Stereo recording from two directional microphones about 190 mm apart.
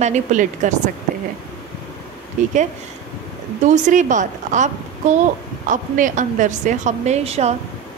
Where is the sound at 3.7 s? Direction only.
40° right (ahead or behind).